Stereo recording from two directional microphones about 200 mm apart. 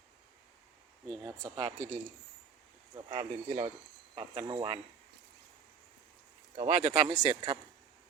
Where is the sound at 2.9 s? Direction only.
30° right (ahead or behind).